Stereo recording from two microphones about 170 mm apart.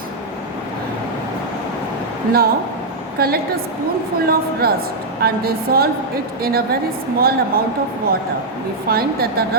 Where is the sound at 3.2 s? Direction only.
60° right (ahead or behind).